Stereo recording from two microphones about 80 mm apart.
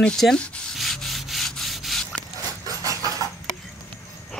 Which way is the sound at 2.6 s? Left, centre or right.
Right.